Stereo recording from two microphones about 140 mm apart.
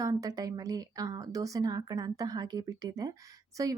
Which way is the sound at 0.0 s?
25° right (ahead or behind).